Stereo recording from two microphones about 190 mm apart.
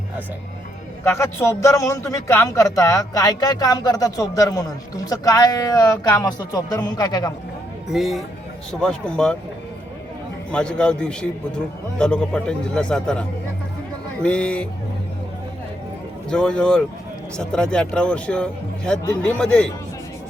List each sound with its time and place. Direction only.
1.0 s a man's voice: 15° left (ahead or behind)
7.9 s a man's voice: centre (ahead or behind)
10.5 s a man's voice: 5° left (ahead or behind)
16.3 s a man's voice: 5° left (ahead or behind)